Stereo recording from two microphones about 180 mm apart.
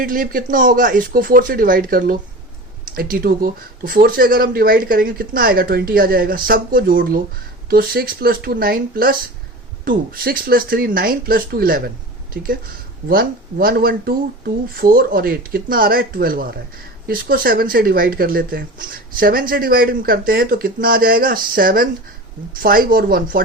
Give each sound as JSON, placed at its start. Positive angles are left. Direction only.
{"t": 0.0, "sound": "speech", "side_deg": -50}